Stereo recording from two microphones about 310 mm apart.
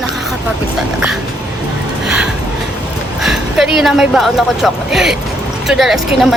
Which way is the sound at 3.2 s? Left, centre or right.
Centre.